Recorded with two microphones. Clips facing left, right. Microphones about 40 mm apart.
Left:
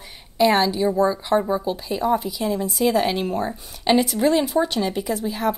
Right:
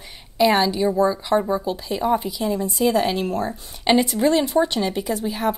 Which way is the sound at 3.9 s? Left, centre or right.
Centre.